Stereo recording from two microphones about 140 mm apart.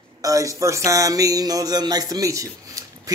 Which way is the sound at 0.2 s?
25° right (ahead or behind).